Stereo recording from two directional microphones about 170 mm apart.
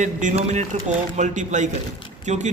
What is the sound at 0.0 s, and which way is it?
A man's voice, 45° right (ahead or behind).